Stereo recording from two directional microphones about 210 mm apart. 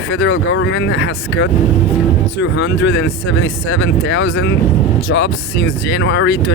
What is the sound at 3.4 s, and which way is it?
Speech, 70° left (ahead or behind).